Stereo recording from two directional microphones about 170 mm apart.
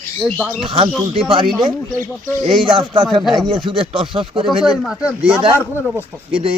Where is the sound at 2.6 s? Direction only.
25° right (ahead or behind).